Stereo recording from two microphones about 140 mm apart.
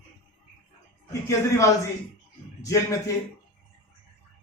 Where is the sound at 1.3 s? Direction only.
20° left (ahead or behind).